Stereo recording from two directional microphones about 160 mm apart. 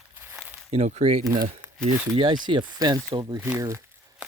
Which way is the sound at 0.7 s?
45° right (ahead or behind).